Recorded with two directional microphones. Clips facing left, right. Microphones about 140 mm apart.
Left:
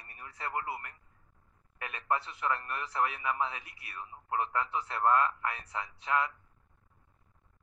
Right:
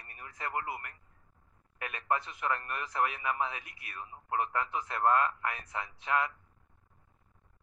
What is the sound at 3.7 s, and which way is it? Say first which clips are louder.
Speech: even; 35° left (ahead or behind).